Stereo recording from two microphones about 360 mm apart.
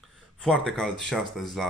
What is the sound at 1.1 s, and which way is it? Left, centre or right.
Speech, centre.